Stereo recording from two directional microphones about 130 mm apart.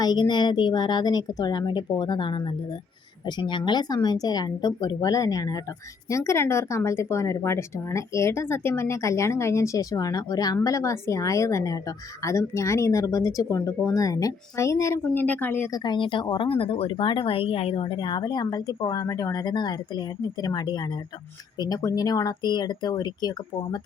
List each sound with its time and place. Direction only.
0.0 s speech: 35° left (ahead or behind); by 15.7 s 15° left (ahead or behind)
15.7 s speech: 35° left (ahead or behind)